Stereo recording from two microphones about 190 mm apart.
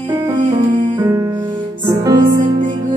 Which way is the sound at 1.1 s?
15° right (ahead or behind).